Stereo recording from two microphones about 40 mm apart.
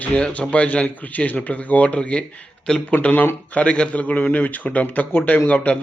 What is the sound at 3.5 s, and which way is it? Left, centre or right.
A man's voice, left.